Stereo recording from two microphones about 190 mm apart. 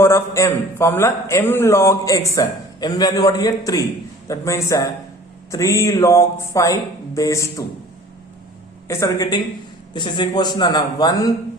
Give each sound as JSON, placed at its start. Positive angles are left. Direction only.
{"t": 0.0, "sound": "a man's voice", "side_deg": 15}
{"t": 8.9, "sound": "a man's voice", "side_deg": 15}